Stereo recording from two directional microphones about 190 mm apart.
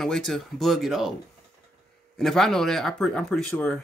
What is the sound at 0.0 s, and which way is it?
Speech, centre (ahead or behind).